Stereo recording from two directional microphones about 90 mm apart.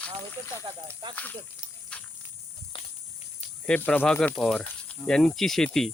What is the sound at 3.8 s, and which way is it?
Speech, 20° left (ahead or behind).